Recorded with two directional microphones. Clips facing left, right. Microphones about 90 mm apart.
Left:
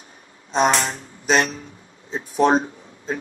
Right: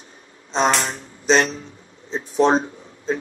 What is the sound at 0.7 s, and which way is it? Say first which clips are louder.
Speech: even; 15° left (ahead or behind).